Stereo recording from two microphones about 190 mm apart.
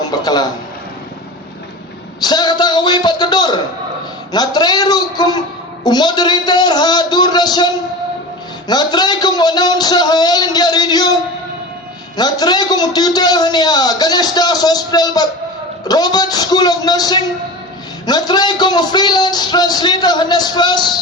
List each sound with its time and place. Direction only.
0.2 s a man's voice: 20° left (ahead or behind)
2.2 s a man's voice: 20° left (ahead or behind)
12.1 s a man's voice: 20° left (ahead or behind)